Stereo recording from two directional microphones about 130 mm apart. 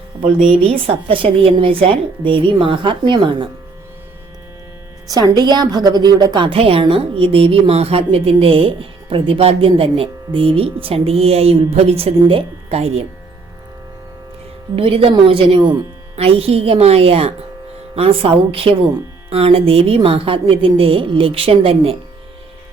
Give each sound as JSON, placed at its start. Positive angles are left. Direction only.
{"t": 0.4, "sound": "a woman's voice", "side_deg": -45}
{"t": 5.0, "sound": "a woman's voice", "side_deg": -30}
{"t": 6.5, "sound": "a woman's voice", "side_deg": -45}
{"t": 14.8, "sound": "a woman's voice", "side_deg": -45}